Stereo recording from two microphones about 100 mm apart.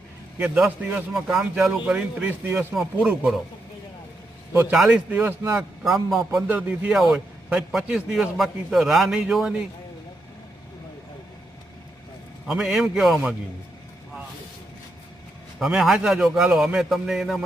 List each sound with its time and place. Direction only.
0.3 s a man's voice: 5° right (ahead or behind)
2.7 s a man's voice: 10° right (ahead or behind)
4.7 s a man's voice: 10° right (ahead or behind)
5.5 s a man's voice: centre (ahead or behind)
6.5 s a man's voice: 15° right (ahead or behind)
6.9 s a man's voice: 5° right (ahead or behind)
12.5 s a man's voice: 5° right (ahead or behind)
15.5 s a man's voice: 5° right (ahead or behind)